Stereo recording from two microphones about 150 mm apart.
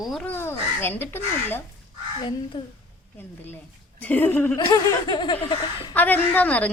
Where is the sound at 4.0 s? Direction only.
10° left (ahead or behind).